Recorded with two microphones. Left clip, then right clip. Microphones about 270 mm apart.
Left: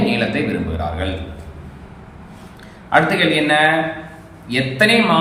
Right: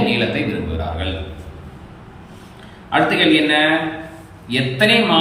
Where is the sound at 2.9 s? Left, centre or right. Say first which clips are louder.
Even; centre.